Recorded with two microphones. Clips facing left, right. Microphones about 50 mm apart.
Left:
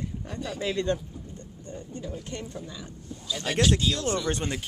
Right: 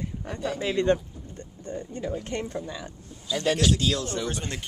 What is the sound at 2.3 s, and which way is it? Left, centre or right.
Speech, right.